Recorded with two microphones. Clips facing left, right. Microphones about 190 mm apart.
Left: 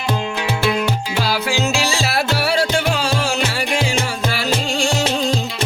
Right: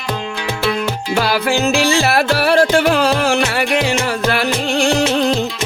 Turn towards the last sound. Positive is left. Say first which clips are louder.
# right 5 dB
turn(degrees=-60)  # may be behind; listen again after turning